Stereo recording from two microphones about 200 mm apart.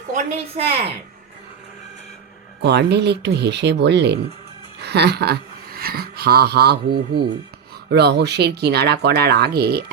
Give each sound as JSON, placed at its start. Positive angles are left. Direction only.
{"t": 0.1, "sound": "speech", "side_deg": -40}
{"t": 2.6, "sound": "speech", "side_deg": -55}